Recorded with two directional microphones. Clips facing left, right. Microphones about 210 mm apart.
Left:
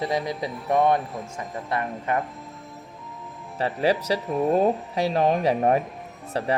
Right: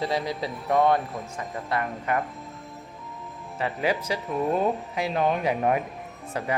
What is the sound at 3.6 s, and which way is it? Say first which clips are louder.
Speech: left 4 dB; 35° left (ahead or behind).